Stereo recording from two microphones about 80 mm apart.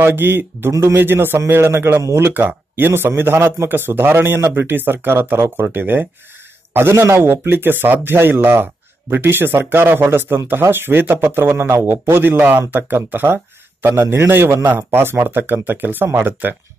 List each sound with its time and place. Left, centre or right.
0.0 s a man's voice: right